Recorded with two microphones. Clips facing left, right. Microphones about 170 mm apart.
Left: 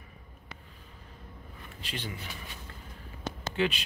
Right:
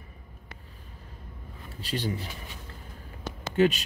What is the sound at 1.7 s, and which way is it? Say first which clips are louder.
Speech: right 8 dB; 35° right (ahead or behind).